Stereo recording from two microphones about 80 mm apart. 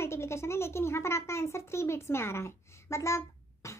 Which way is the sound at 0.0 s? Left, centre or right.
Left.